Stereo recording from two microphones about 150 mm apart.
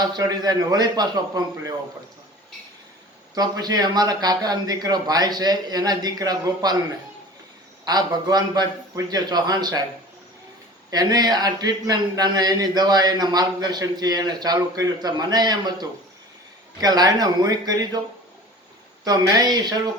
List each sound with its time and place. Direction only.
0.0 s a man's voice: 25° right (ahead or behind)
3.3 s a man's voice: 25° right (ahead or behind)
7.9 s a man's voice: 25° right (ahead or behind)
10.9 s a man's voice: 25° right (ahead or behind)
19.0 s a man's voice: 25° right (ahead or behind)